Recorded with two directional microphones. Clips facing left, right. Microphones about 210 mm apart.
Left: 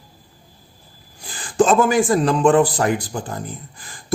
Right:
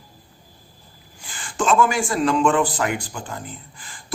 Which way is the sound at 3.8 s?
40° left (ahead or behind).